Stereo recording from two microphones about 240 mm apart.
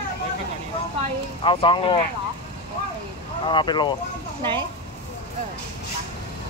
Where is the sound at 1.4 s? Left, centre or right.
Left.